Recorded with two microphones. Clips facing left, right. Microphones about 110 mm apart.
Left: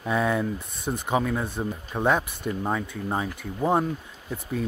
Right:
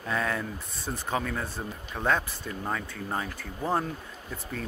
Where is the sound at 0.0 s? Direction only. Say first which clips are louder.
Left 6 dB; 15° left (ahead or behind).